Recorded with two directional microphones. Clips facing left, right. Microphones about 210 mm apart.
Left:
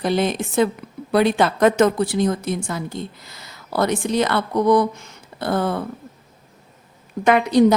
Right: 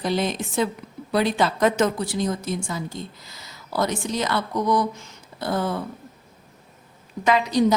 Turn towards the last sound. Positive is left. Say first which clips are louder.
# left 5 dB
turn(degrees=60)  # may be behind; listen again after turning